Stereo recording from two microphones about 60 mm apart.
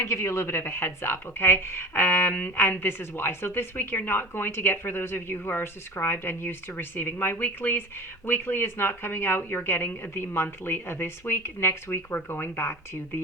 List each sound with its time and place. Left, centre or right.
0.0 s a woman's voice: left